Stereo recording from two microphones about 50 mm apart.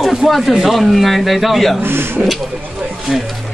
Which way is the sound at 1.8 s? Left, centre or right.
Right.